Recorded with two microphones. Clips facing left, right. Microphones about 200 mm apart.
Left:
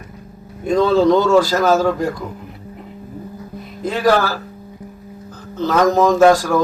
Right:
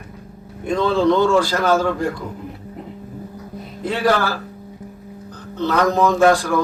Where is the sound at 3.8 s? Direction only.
45° left (ahead or behind).